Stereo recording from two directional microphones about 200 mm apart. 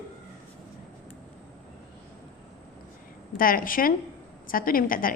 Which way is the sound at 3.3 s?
45° left (ahead or behind).